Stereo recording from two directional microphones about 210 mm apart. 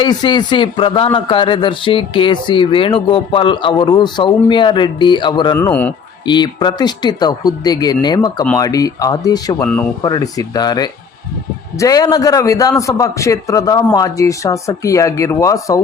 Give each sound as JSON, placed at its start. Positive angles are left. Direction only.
{"t": 0.0, "sound": "speech", "side_deg": 20}
{"t": 5.5, "sound": "a man's voice", "side_deg": 10}
{"t": 6.2, "sound": "a man's voice", "side_deg": 20}